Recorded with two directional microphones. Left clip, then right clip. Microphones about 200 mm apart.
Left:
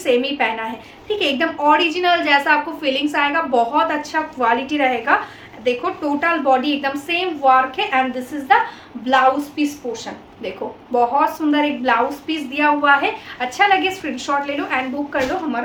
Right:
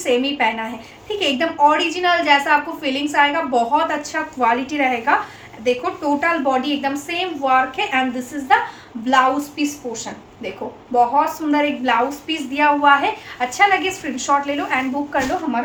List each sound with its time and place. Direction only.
0.0 s a woman's voice: 15° left (ahead or behind)
9.0 s a woman's voice: 15° left (ahead or behind)